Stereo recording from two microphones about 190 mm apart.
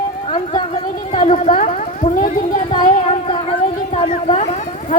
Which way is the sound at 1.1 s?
30° left (ahead or behind).